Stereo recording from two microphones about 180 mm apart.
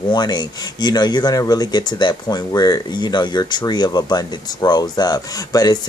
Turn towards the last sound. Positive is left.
turn(degrees=20)  # may be behind; listen again after turning